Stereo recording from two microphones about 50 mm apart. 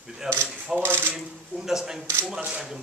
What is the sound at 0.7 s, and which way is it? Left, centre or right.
Speech, right.